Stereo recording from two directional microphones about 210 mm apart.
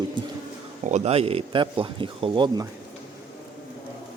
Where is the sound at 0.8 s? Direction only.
30° right (ahead or behind).